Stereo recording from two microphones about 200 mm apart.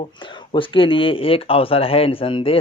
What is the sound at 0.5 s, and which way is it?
Speech, 25° left (ahead or behind).